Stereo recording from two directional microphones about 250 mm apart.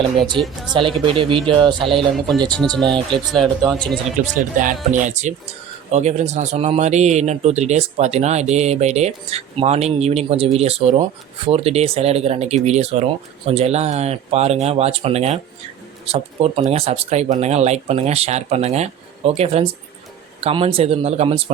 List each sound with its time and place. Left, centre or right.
0.3 s speech: centre
0.7 s a man's voice: right
2.1 s speech: centre
4.4 s a man's voice: right